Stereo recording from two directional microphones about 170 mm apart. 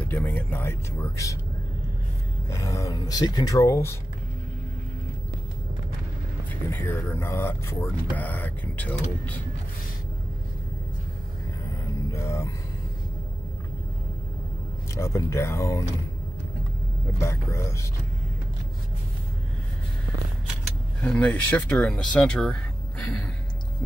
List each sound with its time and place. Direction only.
0.0 s speech: 10° left (ahead or behind)
2.5 s speech: 20° left (ahead or behind)
6.5 s speech: 15° left (ahead or behind)
12.1 s music: 15° left (ahead or behind)
15.0 s speech: 15° left (ahead or behind)
17.2 s speech: 15° left (ahead or behind)
21.0 s speech: 5° left (ahead or behind)